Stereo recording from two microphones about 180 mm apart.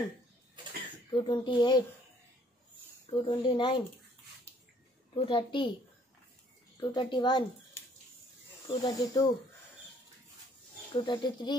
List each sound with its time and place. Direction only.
1.1 s speech: 25° left (ahead or behind)
3.1 s speech: 25° left (ahead or behind)
5.1 s speech: 30° left (ahead or behind)
6.8 s speech: 25° left (ahead or behind)
8.6 s speech: 20° left (ahead or behind)
11.0 s speech: 25° left (ahead or behind)